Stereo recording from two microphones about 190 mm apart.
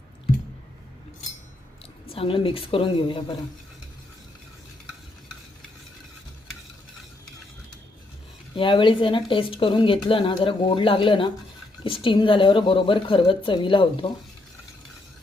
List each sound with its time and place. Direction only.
2.1 s speech: 30° left (ahead or behind)
8.5 s speech: 25° left (ahead or behind)